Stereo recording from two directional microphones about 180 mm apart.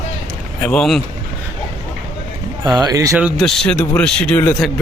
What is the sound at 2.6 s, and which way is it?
Speech, 25° right (ahead or behind).